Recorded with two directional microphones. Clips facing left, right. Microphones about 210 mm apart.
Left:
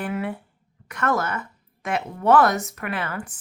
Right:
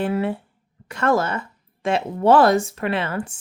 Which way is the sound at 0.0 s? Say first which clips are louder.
Right 5 dB; 25° right (ahead or behind).